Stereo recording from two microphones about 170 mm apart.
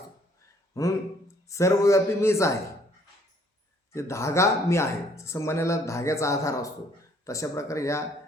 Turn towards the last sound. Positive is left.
turn(degrees=15)  # may be behind; listen again after turning